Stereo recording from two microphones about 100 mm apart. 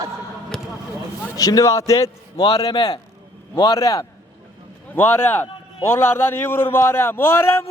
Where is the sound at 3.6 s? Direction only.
35° left (ahead or behind).